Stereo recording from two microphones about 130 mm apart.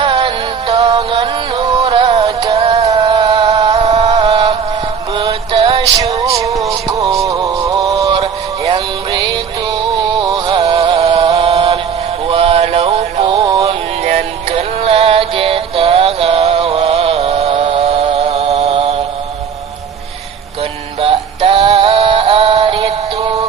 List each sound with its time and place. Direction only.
0.0 s music: 45° right (ahead or behind)
2.8 s music: 30° right (ahead or behind)
3.4 s music: 25° right (ahead or behind)
3.8 s music: 55° right (ahead or behind)
4.1 s music: 35° right (ahead or behind)
6.1 s music: 50° right (ahead or behind)
6.4 s music: 25° right (ahead or behind)
8.2 s music: 40° right (ahead or behind)
10.8 s music: 45° right (ahead or behind)
13.2 s synthetic singing: 35° right (ahead or behind)
21.0 s synthetic singing: 45° right (ahead or behind)